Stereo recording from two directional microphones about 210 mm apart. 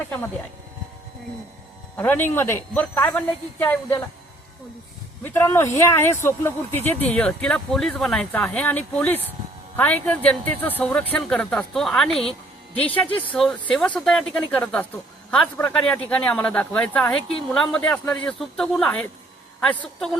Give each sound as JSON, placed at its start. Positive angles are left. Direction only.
{"t": 2.0, "sound": "speech", "side_deg": 10}
{"t": 5.2, "sound": "speech", "side_deg": 10}
{"t": 13.1, "sound": "speech", "side_deg": 25}
{"t": 13.3, "sound": "a woman's voice", "side_deg": 5}